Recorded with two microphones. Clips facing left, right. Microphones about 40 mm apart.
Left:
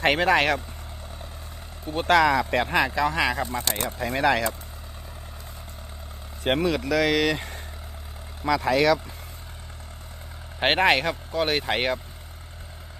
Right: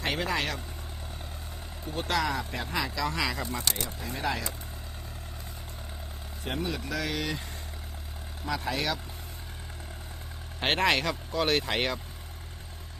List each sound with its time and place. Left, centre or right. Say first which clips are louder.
0.0 s speech: left 10 dB; left
1.9 s speech: left 10 dB; left
3.5 s speech: left 4 dB; left
3.8 s speech: left 8 dB; left
4.1 s speech: left 10 dB; left
6.4 s speech: left 10 dB; left
10.6 s speech: left 5 dB; left